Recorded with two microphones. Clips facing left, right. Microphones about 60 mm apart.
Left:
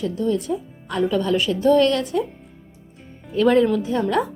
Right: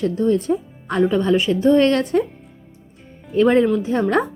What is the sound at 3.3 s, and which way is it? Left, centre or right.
Speech, right.